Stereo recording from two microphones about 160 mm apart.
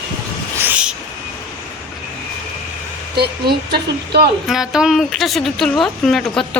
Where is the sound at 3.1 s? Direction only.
85° right.